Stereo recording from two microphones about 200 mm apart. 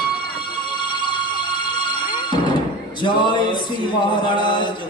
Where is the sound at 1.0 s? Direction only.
25° left (ahead or behind).